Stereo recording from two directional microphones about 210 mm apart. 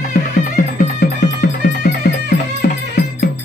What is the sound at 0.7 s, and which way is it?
Music, 45° left (ahead or behind).